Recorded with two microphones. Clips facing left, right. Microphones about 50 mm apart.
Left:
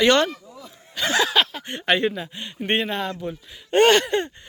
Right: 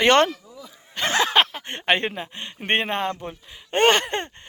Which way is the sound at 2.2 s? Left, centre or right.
Right.